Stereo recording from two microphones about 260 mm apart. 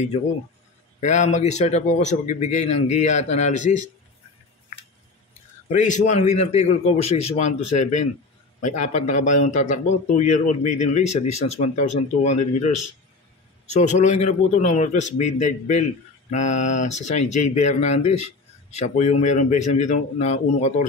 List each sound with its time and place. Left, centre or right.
1.0 s a man's voice: left
5.7 s a man's voice: left
13.7 s a man's voice: left